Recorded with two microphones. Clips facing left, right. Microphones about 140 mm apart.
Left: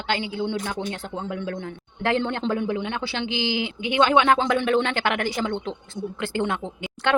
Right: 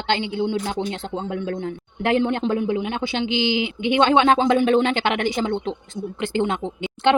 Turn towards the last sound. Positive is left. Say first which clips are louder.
# right 6 dB
turn(degrees=-20)  # may be behind; listen again after turning